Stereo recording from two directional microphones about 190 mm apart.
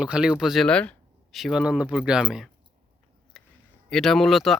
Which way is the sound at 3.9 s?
Centre (ahead or behind).